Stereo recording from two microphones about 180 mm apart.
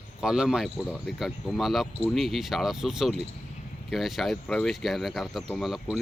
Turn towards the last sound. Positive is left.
turn(degrees=0)  # may be behind; listen again after turning